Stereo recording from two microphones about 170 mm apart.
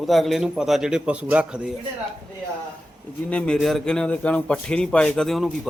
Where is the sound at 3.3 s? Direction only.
5° left (ahead or behind).